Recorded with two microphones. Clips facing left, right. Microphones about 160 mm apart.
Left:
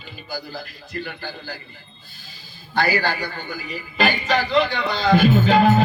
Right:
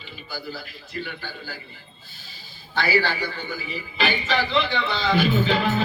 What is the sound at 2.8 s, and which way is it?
A man's voice, 45° left (ahead or behind).